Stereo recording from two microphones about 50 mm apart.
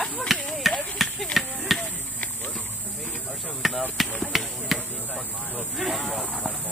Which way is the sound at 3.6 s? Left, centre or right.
Centre.